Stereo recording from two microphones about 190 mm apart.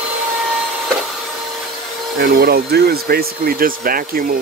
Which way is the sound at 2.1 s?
55° right (ahead or behind).